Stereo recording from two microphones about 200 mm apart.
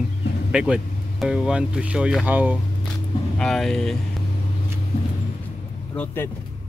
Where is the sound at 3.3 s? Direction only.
Centre (ahead or behind).